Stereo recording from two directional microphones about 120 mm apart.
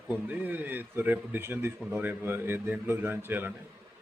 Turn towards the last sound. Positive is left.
turn(degrees=-15)  # may be behind; listen again after turning